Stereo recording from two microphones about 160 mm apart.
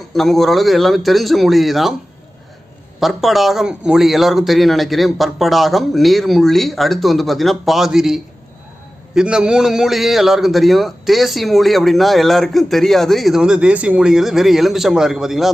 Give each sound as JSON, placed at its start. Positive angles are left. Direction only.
{"t": 0.1, "sound": "a man's voice", "side_deg": 0}
{"t": 3.0, "sound": "a man's voice", "side_deg": 0}